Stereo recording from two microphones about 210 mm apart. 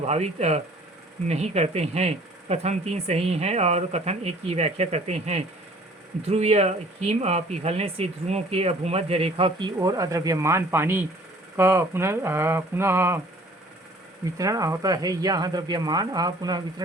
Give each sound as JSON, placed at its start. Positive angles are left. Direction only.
{"t": 0.0, "sound": "speech", "side_deg": -30}
{"t": 14.3, "sound": "speech", "side_deg": -15}